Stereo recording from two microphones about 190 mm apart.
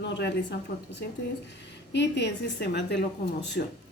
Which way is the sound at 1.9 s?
65° left (ahead or behind).